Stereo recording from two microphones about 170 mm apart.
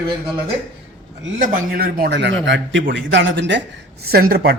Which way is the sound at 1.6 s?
60° right (ahead or behind).